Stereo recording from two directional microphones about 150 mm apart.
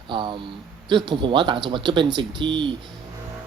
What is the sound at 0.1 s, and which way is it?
Speech, 35° right (ahead or behind).